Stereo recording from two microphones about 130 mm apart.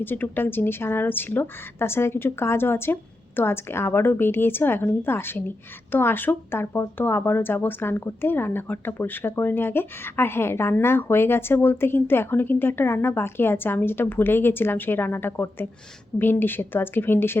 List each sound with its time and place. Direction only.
0.0 s speech: 15° left (ahead or behind)